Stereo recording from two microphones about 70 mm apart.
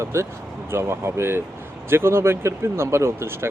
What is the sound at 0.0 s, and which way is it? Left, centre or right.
Speech, right.